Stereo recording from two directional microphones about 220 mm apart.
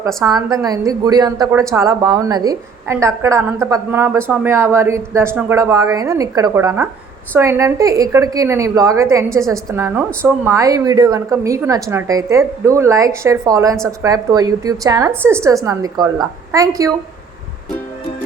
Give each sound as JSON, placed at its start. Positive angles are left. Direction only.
{"t": 0.2, "sound": "a woman's voice", "side_deg": -15}